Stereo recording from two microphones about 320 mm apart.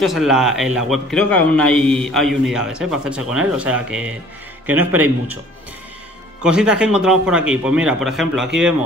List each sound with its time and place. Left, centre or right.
0.0 s a man's voice: centre
6.4 s a man's voice: centre